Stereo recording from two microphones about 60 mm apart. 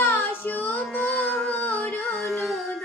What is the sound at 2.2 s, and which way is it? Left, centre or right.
Child singing, centre.